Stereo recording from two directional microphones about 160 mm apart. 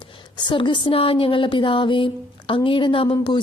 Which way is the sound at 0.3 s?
30° left (ahead or behind).